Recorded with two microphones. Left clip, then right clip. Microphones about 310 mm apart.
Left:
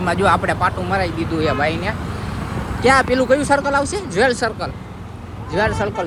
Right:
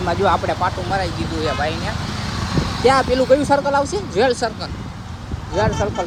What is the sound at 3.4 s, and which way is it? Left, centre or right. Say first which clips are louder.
Speech: even; left.